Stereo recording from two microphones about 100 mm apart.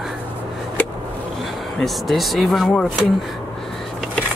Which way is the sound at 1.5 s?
Centre (ahead or behind).